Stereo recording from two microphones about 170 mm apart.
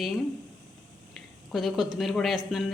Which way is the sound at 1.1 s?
Centre (ahead or behind).